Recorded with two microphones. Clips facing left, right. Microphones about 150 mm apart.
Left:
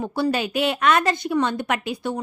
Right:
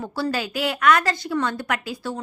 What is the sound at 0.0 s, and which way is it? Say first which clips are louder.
A woman's voice: left 3 dB; 20° left (ahead or behind).